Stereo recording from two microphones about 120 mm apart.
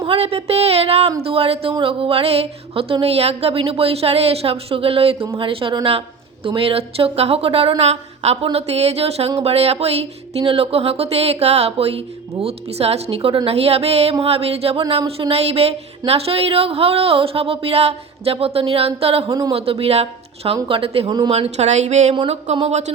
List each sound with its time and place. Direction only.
0.0 s music: 50° right (ahead or behind)
1.2 s speech: 55° right (ahead or behind)
8.5 s music: 60° right (ahead or behind)
19.5 s speech: 50° right (ahead or behind); by 22.9 s 70° right (ahead or behind)